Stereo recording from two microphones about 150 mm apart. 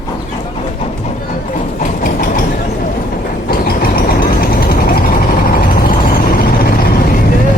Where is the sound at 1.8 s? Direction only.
60° left (ahead or behind).